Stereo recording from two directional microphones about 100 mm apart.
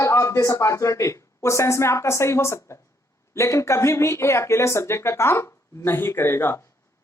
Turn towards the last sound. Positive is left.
turn(degrees=25)  # may be behind; listen again after turning